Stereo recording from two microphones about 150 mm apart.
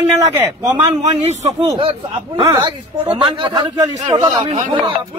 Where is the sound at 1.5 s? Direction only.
35° right (ahead or behind).